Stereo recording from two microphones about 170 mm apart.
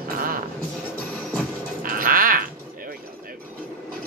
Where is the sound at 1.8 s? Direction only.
55° right (ahead or behind).